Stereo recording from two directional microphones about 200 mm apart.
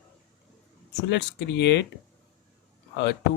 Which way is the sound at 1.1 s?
60° left (ahead or behind).